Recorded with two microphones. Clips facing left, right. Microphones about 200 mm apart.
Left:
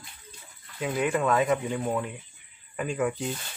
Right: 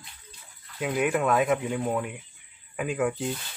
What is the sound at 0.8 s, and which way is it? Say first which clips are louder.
Speech: right 1 dB; 5° right (ahead or behind).